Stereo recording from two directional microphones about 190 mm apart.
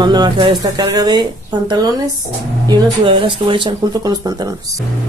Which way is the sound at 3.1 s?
25° right (ahead or behind).